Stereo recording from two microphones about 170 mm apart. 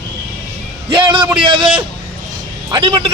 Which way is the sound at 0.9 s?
30° right (ahead or behind).